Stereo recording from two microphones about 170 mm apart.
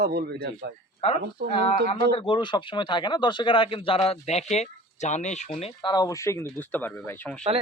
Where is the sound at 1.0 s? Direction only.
40° left (ahead or behind).